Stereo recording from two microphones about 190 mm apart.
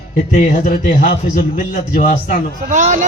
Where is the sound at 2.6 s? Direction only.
40° right (ahead or behind).